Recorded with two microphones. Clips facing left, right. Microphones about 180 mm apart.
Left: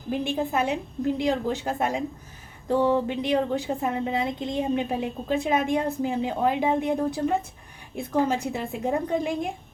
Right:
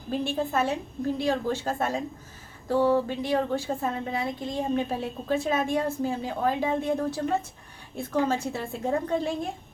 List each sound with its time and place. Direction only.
0.1 s speech: 15° left (ahead or behind)